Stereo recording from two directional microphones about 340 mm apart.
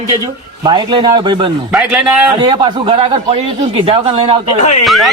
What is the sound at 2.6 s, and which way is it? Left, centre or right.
A man's voice, centre.